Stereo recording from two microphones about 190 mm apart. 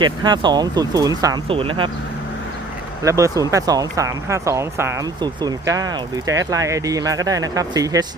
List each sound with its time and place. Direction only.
0.0 s speech: 25° right (ahead or behind)
3.0 s speech: 15° right (ahead or behind)